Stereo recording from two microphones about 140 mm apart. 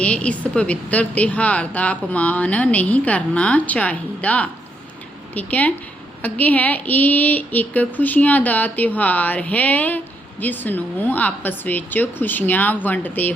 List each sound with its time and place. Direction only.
0.0 s a woman's voice: 10° left (ahead or behind)